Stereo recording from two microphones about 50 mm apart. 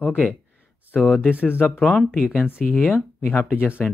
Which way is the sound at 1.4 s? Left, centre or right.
Left.